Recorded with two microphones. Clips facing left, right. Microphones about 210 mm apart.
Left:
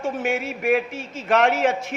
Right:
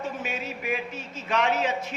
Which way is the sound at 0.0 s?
85° left.